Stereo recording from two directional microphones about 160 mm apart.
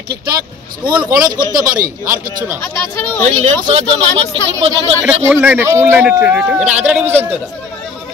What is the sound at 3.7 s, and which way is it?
Speech, 40° right (ahead or behind).